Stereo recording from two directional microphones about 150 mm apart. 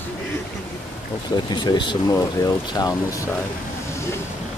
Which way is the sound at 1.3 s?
30° left (ahead or behind).